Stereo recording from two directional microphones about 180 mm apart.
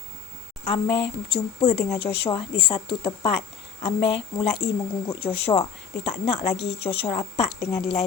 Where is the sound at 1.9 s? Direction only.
30° left (ahead or behind).